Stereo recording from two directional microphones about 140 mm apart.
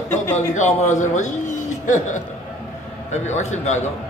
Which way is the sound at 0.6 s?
55° left (ahead or behind).